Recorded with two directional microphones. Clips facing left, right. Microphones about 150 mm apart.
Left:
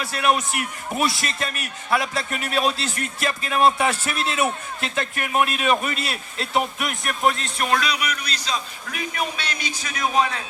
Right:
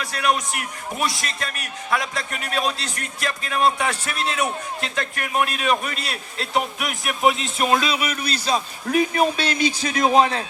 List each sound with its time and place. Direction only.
0.0 s a man's voice: 5° left (ahead or behind)
7.6 s a sound: 25° right (ahead or behind)
8.4 s a man's voice: 35° right (ahead or behind)